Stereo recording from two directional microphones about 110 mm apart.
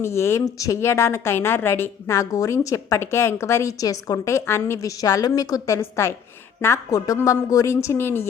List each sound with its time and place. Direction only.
0.0 s speech: 25° left (ahead or behind)